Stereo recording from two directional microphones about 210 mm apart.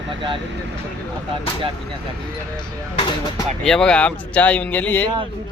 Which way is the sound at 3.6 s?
5° left (ahead or behind).